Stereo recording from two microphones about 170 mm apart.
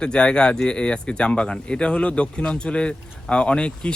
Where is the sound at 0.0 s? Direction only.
5° left (ahead or behind).